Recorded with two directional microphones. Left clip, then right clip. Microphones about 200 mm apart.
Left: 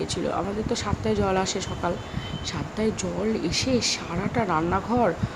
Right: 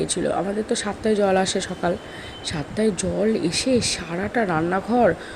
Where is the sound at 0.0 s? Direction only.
15° right (ahead or behind).